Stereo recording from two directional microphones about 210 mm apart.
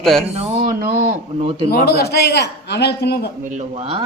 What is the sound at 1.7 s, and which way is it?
A man's voice, 50° left (ahead or behind).